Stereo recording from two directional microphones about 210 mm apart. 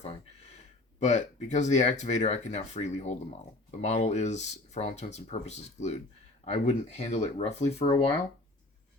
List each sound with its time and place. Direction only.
0.9 s speech: 35° left (ahead or behind)